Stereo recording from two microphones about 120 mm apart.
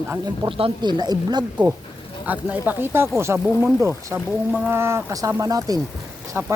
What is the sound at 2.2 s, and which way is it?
Speech, 15° right (ahead or behind).